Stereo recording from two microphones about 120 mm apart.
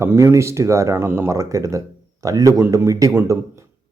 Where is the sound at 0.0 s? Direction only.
20° right (ahead or behind).